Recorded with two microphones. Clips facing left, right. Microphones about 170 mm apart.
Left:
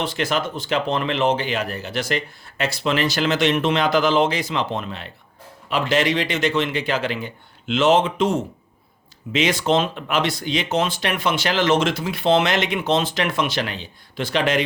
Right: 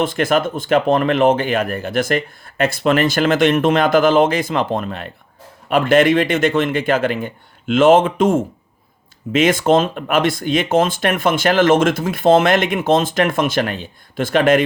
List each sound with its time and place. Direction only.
0.0 s speech: 50° right (ahead or behind)